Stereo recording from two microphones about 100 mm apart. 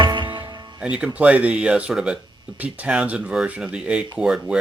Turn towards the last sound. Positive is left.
turn(degrees=-10)  # may be behind; listen again after turning